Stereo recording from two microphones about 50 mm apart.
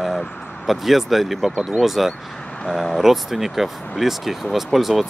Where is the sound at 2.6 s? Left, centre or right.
Centre.